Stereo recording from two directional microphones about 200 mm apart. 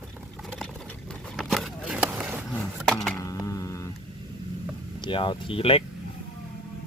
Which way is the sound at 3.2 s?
15° left (ahead or behind).